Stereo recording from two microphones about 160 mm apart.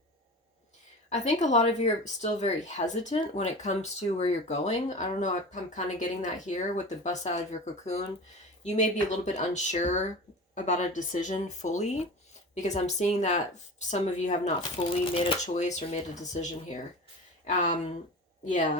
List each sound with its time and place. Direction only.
1.1 s speech: 45° left (ahead or behind)
15.1 s speech: 35° left (ahead or behind)
15.4 s speech: 45° left (ahead or behind)